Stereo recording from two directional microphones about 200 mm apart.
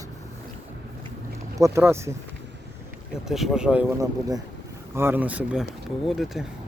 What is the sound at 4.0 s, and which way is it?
Speech, 20° right (ahead or behind).